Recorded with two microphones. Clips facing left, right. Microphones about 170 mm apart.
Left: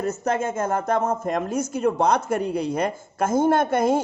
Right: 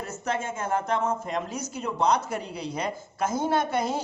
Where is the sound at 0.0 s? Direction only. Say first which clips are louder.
Left 7 dB; 45° left (ahead or behind).